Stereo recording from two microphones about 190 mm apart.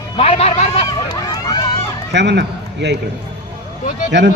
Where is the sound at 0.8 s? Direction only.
20° left (ahead or behind).